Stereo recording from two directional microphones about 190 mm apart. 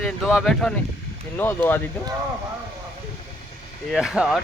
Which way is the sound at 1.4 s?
10° left (ahead or behind).